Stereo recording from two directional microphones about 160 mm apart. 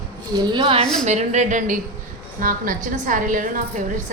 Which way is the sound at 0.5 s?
35° right (ahead or behind).